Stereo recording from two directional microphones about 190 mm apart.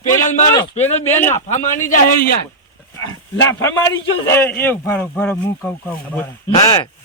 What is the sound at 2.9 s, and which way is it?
A man's voice, 15° left (ahead or behind).